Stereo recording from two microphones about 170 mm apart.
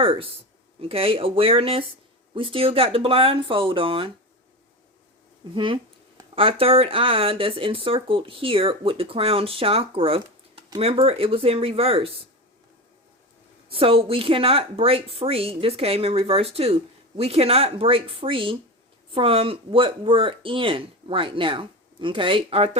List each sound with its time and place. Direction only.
0.0 s speech: 35° right (ahead or behind)
5.5 s speech: 30° right (ahead or behind)
13.7 s speech: 35° right (ahead or behind)